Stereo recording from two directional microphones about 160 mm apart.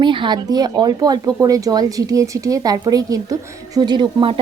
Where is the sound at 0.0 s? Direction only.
30° right (ahead or behind).